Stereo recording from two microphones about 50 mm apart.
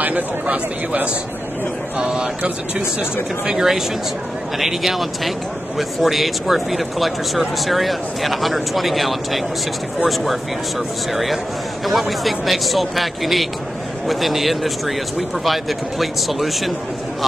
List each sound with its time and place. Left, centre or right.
0.0 s speech: right
3.4 s speech: centre
11.8 s speech: centre